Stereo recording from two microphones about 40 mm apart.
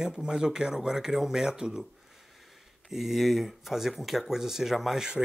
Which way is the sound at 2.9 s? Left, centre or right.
Centre.